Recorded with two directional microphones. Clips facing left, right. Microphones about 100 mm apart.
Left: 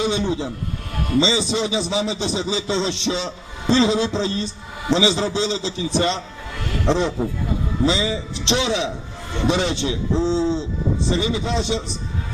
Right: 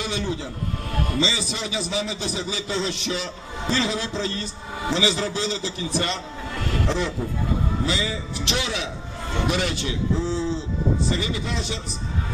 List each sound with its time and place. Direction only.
0.0 s a man's voice: 20° left (ahead or behind)